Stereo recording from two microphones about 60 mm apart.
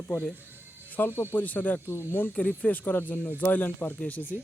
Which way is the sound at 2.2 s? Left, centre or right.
Left.